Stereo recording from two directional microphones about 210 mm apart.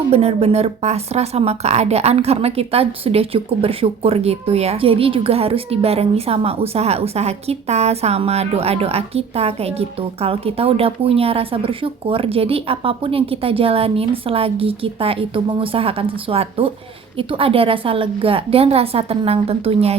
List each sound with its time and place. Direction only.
0.1 s a woman's voice: 30° right (ahead or behind)